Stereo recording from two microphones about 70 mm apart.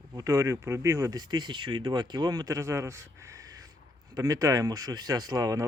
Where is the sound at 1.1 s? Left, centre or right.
Right.